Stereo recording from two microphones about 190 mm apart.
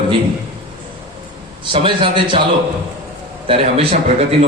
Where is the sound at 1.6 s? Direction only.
25° right (ahead or behind).